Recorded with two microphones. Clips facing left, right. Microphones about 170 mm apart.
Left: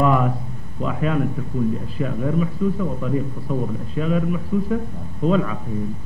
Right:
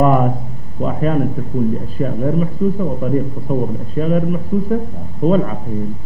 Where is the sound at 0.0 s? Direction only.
40° right (ahead or behind).